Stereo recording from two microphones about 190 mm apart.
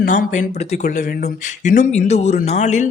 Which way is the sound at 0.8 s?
55° left (ahead or behind).